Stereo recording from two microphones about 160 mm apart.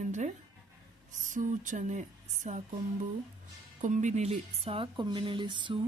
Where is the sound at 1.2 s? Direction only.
55° right (ahead or behind).